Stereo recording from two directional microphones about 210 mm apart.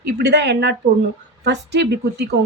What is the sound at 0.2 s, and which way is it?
A woman's voice, 55° right (ahead or behind).